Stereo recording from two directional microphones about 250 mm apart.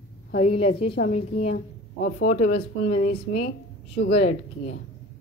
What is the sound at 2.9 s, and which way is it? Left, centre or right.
Speech, left.